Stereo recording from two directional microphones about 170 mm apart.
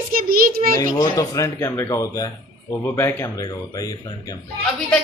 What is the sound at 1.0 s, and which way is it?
Speech, 20° left (ahead or behind).